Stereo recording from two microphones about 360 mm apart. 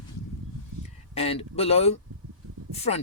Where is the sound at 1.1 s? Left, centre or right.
Centre.